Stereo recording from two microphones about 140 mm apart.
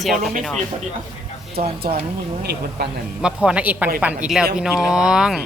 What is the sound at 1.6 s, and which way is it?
Speech, 90° right.